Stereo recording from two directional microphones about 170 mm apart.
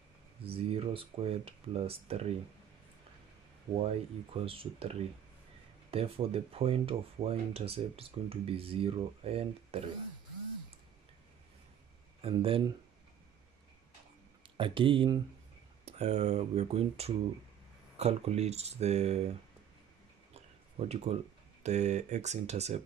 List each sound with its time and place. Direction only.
0.4 s speech: 35° right (ahead or behind)
3.7 s speech: 35° right (ahead or behind)
12.2 s speech: 35° right (ahead or behind)
14.6 s speech: 30° right (ahead or behind)
15.8 s speech: 40° right (ahead or behind)
20.9 s speech: 40° right (ahead or behind)